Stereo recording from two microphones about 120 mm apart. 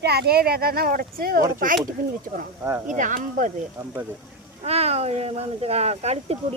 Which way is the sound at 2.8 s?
90° right.